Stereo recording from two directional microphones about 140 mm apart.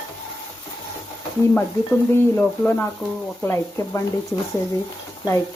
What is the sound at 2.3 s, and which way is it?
A woman's voice, 10° left (ahead or behind).